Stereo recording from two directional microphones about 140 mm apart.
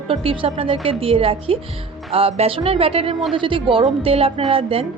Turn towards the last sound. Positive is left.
turn(degrees=-45)  # may be behind; listen again after turning